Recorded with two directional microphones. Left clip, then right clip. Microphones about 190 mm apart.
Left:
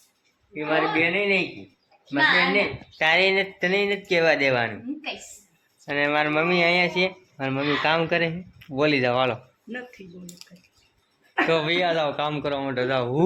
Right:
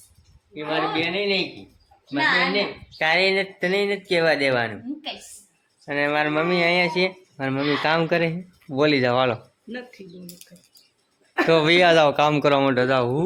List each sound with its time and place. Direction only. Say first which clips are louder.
0.5 s a woman's voice: left 1 dB; 5° right (ahead or behind)
5.8 s a woman's voice: right 1 dB; 10° right (ahead or behind)
11.4 s speech: right 7 dB; 30° right (ahead or behind)